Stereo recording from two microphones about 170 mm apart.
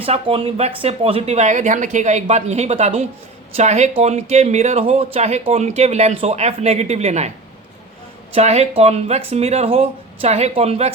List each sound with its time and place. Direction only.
0.0 s speech: 35° right (ahead or behind)
8.3 s speech: 40° right (ahead or behind)